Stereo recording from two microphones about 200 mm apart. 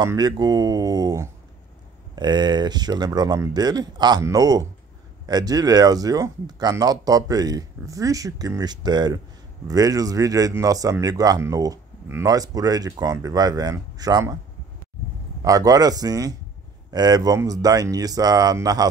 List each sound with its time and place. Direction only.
0.0 s speech: 20° right (ahead or behind)
15.4 s speech: 15° right (ahead or behind)